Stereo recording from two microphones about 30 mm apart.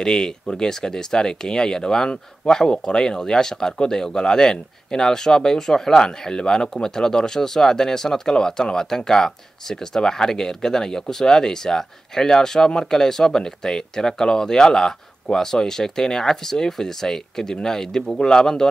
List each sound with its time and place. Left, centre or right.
0.0 s speech: left